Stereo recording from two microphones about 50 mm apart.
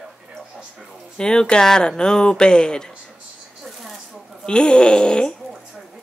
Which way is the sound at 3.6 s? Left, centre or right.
Centre.